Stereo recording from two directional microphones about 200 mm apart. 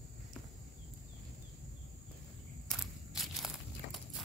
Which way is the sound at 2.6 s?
Centre (ahead or behind).